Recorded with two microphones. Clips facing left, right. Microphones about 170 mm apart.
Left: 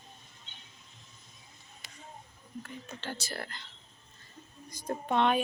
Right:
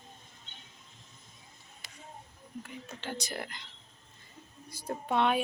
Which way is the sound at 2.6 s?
10° right (ahead or behind).